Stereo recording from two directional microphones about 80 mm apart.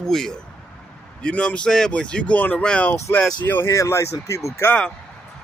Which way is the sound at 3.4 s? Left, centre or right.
Left.